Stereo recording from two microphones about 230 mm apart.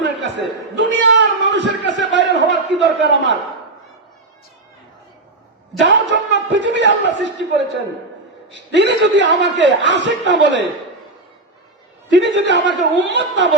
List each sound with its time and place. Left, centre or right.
0.0 s a sound: right
5.8 s a man's voice: right
8.7 s a man's voice: right
12.1 s a man's voice: right